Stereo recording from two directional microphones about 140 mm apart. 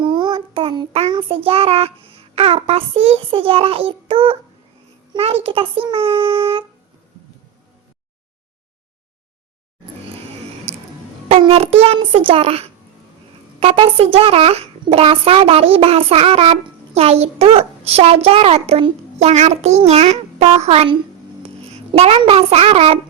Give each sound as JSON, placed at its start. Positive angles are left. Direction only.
{"t": 0.0, "sound": "child singing", "side_deg": -35}
{"t": 1.1, "sound": "a child's voice", "side_deg": -40}
{"t": 10.7, "sound": "music", "side_deg": -45}
{"t": 11.3, "sound": "a child's voice", "side_deg": -40}